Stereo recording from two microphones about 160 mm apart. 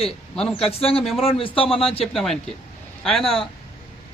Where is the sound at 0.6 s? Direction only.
35° left (ahead or behind).